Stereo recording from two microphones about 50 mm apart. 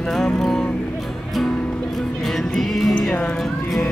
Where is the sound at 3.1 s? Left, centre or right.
Left.